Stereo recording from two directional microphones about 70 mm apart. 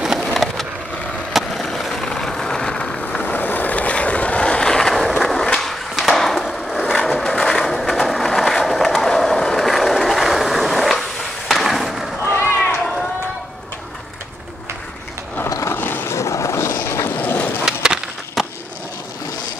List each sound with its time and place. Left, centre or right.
0.2 s a sound: centre
1.3 s skateboard: centre
12.4 s run: left
15.7 s a sound: left
16.2 s boat: left
17.2 s skateboard: left
17.6 s skateboard: centre